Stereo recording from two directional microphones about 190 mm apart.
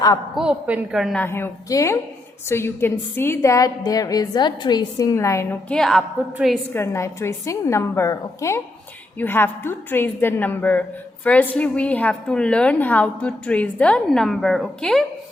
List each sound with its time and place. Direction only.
0.3 s a woman's voice: 5° right (ahead or behind)
1.2 s a woman's voice: 10° left (ahead or behind)
6.7 s a woman's voice: 15° left (ahead or behind)